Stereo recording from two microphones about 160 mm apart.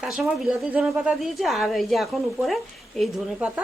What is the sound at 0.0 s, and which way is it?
Speech, 5° right (ahead or behind).